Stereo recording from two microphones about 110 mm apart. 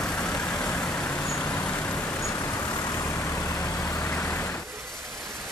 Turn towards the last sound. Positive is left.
turn(degrees=20)  # may be behind; listen again after turning